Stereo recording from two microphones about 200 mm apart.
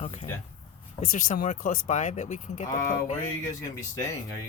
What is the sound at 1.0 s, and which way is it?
Speech, 45° left (ahead or behind).